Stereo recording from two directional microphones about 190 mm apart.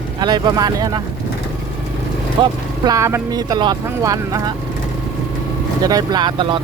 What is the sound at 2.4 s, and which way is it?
Speech, 20° right (ahead or behind).